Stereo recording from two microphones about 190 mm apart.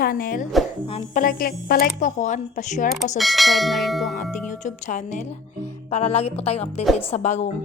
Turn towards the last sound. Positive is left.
turn(degrees=40)  # may be behind; listen again after turning